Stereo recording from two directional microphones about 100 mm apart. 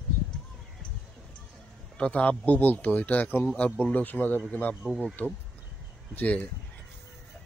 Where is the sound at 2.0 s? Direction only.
10° left (ahead or behind).